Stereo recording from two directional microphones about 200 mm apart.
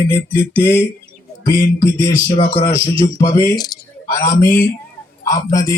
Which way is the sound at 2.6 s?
15° left (ahead or behind).